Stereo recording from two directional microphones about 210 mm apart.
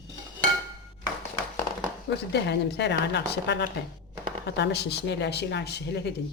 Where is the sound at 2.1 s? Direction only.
55° left (ahead or behind).